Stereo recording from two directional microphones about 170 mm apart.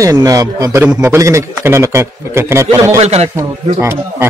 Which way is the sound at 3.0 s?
40° right (ahead or behind).